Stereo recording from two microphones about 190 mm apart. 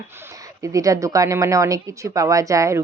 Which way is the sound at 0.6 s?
15° right (ahead or behind).